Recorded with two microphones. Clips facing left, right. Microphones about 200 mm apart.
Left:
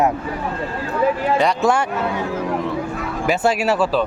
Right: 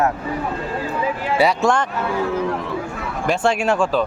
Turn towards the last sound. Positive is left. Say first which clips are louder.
# even
turn(degrees=5)  # may be behind; listen again after turning